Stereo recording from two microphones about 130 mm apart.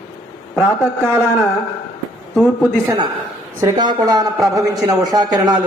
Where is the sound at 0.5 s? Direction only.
15° left (ahead or behind).